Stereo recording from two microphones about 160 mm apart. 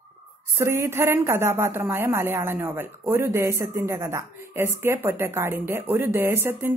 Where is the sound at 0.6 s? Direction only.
15° right (ahead or behind).